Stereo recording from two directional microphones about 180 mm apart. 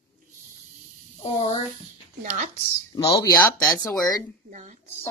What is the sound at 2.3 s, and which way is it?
Speech, 40° right (ahead or behind).